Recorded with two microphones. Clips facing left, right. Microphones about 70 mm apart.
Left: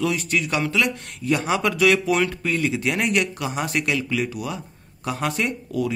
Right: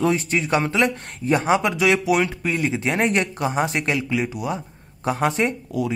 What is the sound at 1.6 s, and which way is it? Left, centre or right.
Speech, centre.